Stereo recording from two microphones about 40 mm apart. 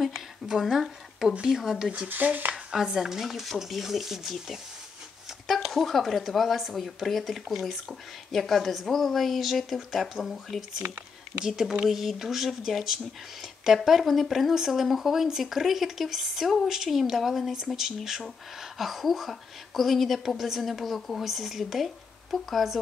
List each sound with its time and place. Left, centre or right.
0.0 s speech: centre
2.0 s speech: right
2.7 s speech: centre
10.8 s speech: right
11.4 s speech: centre